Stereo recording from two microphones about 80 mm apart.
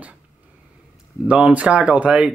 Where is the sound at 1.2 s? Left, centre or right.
Centre.